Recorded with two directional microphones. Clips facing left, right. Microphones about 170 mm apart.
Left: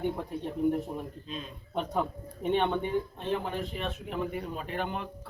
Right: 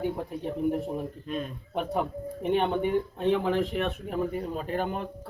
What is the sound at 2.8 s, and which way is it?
Speech, 65° right (ahead or behind).